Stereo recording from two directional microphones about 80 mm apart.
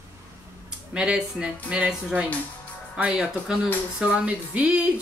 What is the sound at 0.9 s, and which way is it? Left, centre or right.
A woman's voice, centre.